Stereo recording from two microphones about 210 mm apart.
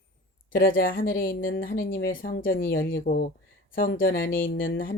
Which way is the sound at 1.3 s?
60° left (ahead or behind).